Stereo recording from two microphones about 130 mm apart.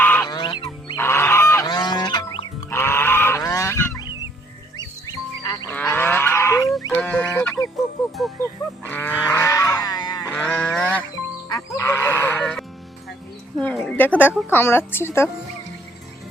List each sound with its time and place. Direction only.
0.0 s goose: 15° left (ahead or behind)
0.3 s goose: 35° left (ahead or behind)
0.9 s goose: 20° left (ahead or behind)
1.6 s goose: 35° left (ahead or behind)
2.6 s goose: 20° left (ahead or behind)
4.8 s goose: 30° left (ahead or behind)
5.7 s cattle: 15° left (ahead or behind)
6.9 s fowl: 10° left (ahead or behind)
8.8 s livestock: 15° left (ahead or behind); by 10.2 s 30° left (ahead or behind)
10.2 s sheep: 10° left (ahead or behind)
11.4 s fowl: 25° left (ahead or behind)
13.6 s a sound: 10° left (ahead or behind)
14.5 s speech: 15° left (ahead or behind)